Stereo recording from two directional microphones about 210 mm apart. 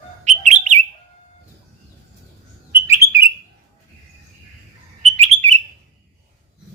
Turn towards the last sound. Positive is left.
turn(degrees=-30)  # may be behind; listen again after turning